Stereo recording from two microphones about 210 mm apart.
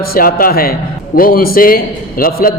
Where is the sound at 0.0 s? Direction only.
45° left (ahead or behind).